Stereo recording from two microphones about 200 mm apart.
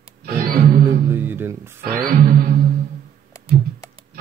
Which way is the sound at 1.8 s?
45° right (ahead or behind).